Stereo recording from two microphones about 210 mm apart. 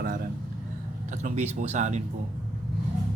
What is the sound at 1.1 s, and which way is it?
Speech, 35° right (ahead or behind).